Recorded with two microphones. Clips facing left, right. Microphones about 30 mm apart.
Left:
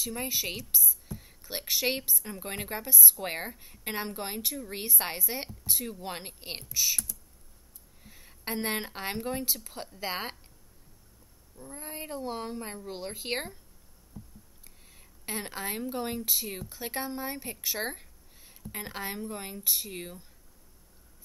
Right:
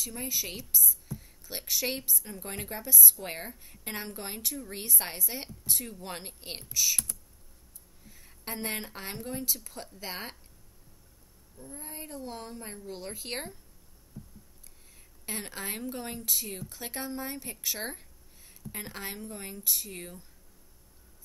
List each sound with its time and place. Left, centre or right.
0.0 s a woman's voice: left
2.1 s a woman's voice: centre
8.0 s speech: centre
11.6 s speech: left
15.0 s a woman's voice: centre